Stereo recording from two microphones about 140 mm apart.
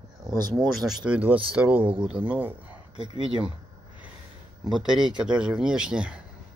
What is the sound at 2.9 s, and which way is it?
Speech, 35° right (ahead or behind).